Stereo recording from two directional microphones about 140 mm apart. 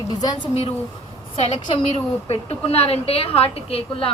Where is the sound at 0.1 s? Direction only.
30° left (ahead or behind).